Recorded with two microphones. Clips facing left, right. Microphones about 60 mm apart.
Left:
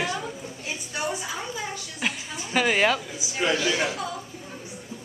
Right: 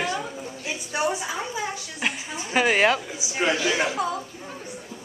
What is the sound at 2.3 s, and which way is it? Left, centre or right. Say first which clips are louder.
Speech: right 2 dB; centre.